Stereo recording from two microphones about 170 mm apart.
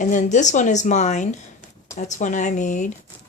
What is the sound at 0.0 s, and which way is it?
Speech, 45° left (ahead or behind).